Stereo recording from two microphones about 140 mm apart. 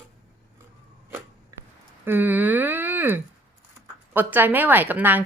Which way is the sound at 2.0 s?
15° right (ahead or behind).